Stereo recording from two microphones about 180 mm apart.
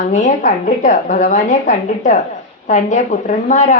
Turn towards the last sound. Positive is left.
turn(degrees=45)  # may be behind; listen again after turning